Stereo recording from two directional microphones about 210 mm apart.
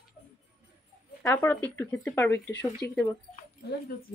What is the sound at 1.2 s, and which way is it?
Speech, 10° left (ahead or behind).